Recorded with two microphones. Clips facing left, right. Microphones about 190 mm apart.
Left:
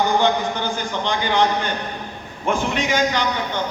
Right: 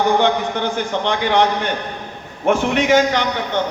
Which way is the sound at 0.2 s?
70° right (ahead or behind).